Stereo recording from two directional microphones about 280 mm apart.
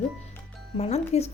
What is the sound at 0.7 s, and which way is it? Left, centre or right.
Speech, left.